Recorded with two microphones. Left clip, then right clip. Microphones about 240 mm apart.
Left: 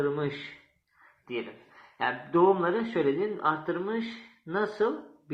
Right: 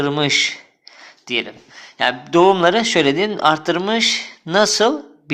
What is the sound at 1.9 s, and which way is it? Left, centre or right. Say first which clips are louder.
Speech: right 11 dB; right.